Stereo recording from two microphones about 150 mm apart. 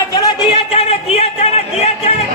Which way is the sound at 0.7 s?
45° left (ahead or behind).